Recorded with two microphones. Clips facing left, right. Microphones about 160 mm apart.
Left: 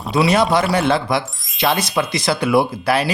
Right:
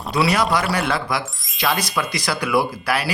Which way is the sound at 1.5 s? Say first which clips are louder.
Left 4 dB; 25° left (ahead or behind).